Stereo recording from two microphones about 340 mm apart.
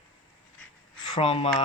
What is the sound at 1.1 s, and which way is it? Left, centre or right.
Speech, centre.